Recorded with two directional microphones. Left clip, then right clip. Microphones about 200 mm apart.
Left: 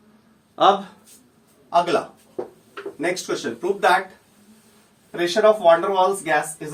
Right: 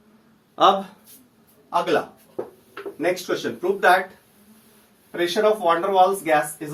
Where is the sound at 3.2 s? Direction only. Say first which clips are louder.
Even; 25° left (ahead or behind).